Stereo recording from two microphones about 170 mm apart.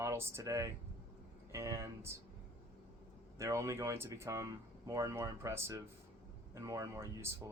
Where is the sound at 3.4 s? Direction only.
15° right (ahead or behind).